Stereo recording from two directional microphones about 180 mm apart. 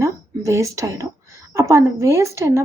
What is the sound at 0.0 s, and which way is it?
A woman's voice, 15° right (ahead or behind).